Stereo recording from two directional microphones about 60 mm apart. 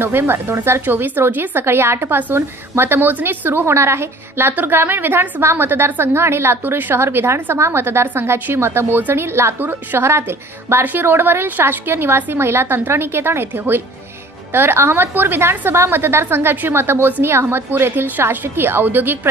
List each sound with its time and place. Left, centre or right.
0.0 s a woman's voice: right